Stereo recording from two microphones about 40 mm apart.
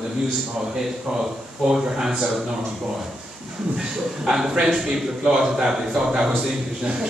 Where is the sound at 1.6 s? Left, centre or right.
Centre.